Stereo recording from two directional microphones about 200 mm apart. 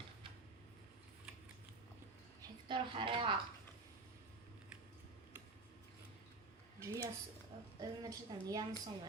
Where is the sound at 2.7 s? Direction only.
25° right (ahead or behind).